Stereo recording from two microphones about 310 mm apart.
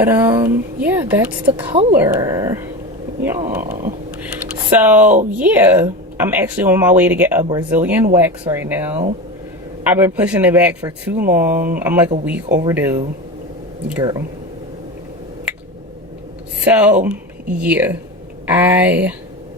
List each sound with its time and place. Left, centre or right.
0.0 s speech: centre
1.7 s speech: centre
2.0 s speech: centre
16.6 s speech: centre